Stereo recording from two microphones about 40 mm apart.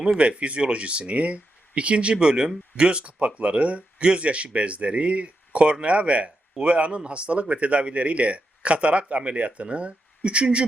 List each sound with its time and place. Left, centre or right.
0.0 s speech: right